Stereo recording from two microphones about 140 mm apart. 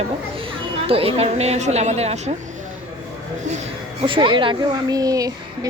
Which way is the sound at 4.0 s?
35° right (ahead or behind).